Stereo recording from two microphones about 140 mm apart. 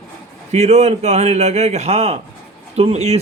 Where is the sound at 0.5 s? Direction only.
50° right (ahead or behind).